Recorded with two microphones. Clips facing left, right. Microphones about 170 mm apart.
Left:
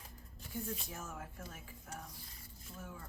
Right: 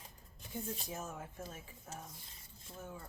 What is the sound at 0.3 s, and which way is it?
Speech, 20° right (ahead or behind).